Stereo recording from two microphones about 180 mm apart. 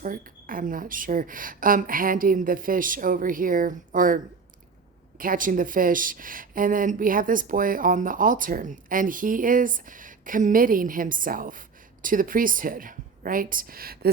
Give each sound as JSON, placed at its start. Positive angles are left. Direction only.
{"t": 0.0, "sound": "speech", "side_deg": -50}